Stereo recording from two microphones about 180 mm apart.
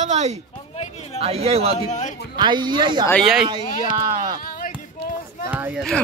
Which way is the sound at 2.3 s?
25° right (ahead or behind).